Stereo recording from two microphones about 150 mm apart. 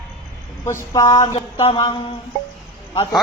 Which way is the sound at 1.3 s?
40° left (ahead or behind).